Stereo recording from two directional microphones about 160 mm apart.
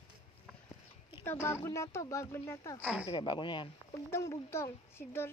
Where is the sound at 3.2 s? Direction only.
30° left (ahead or behind).